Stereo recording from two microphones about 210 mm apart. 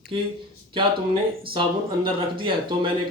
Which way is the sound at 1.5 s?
25° right (ahead or behind).